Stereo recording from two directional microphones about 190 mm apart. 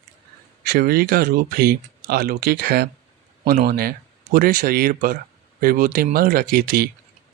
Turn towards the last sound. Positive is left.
turn(degrees=-50)  # may be behind; listen again after turning